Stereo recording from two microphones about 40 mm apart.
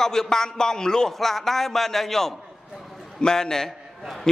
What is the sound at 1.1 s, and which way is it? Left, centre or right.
A man's voice, centre.